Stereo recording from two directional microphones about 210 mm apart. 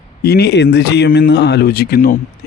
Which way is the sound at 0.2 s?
50° left (ahead or behind).